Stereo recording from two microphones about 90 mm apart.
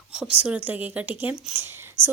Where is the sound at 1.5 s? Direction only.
20° right (ahead or behind).